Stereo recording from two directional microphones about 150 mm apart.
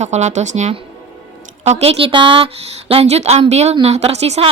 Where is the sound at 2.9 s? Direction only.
45° right (ahead or behind).